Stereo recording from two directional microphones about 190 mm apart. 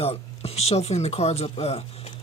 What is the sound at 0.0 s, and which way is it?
Speech, 30° left (ahead or behind).